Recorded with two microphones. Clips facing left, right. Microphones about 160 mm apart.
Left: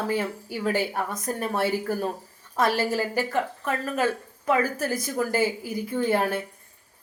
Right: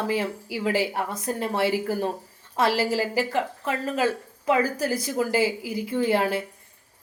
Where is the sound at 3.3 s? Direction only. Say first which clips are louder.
Even; 25° right (ahead or behind).